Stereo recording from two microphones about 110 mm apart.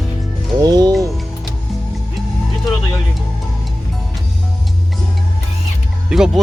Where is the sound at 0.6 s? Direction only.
35° right (ahead or behind).